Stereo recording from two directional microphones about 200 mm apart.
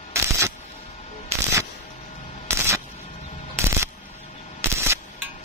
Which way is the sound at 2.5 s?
15° right (ahead or behind).